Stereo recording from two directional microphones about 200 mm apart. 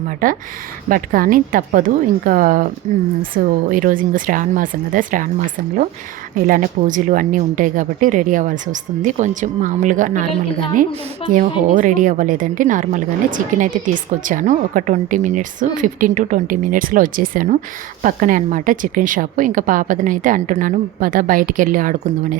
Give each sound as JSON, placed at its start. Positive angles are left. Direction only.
{"t": 0.2, "sound": "speech", "side_deg": -45}
{"t": 6.5, "sound": "a woman's voice", "side_deg": -40}
{"t": 11.3, "sound": "a woman's voice", "side_deg": -40}